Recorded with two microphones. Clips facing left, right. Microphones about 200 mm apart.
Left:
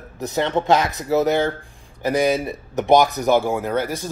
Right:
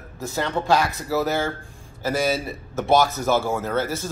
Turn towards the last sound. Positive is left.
turn(degrees=15)  # may be behind; listen again after turning